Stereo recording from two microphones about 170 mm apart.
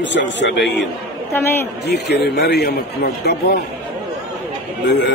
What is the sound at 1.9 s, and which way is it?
Speech, 80° left.